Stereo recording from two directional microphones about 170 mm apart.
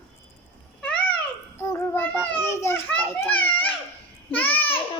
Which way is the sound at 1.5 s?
15° left (ahead or behind).